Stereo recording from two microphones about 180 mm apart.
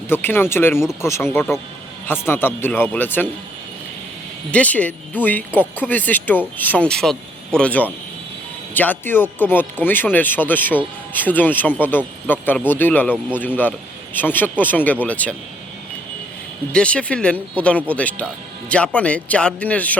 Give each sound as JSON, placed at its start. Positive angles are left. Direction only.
{"t": 0.1, "sound": "speech", "side_deg": 10}
{"t": 4.5, "sound": "speech", "side_deg": 10}
{"t": 16.7, "sound": "speech", "side_deg": 5}